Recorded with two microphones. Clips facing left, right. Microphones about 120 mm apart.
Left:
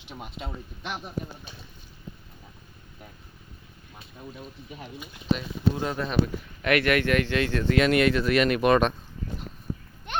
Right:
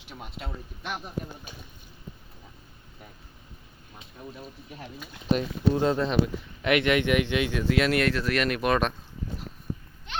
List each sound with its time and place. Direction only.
0.0 s speech: centre (ahead or behind)
4.4 s speech: centre (ahead or behind)
5.7 s speech: 25° right (ahead or behind); by 9.0 s centre (ahead or behind)
10.1 s a sound: 50° left (ahead or behind)